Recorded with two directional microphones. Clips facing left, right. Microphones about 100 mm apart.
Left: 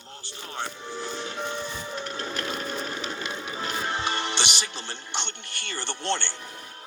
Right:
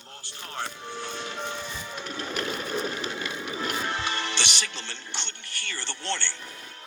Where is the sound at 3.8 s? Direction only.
30° left (ahead or behind).